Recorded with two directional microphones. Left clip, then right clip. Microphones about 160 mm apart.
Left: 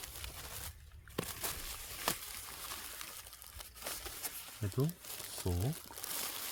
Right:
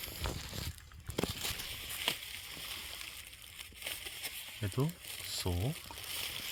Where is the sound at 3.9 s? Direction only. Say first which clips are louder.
Right 3 dB; 20° left (ahead or behind).